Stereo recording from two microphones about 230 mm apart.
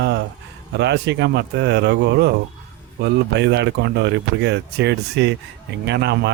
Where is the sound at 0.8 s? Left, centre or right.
Right.